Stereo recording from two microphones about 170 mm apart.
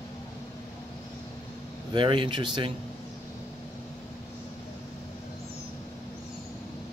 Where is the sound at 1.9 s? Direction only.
30° right (ahead or behind).